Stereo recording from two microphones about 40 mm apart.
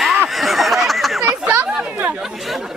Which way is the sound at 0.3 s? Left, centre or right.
Centre.